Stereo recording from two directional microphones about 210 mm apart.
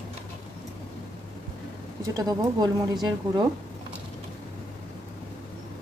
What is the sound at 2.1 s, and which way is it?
A woman's voice, 15° right (ahead or behind).